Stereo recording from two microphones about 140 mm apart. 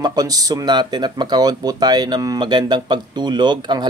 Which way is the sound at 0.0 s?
25° right (ahead or behind).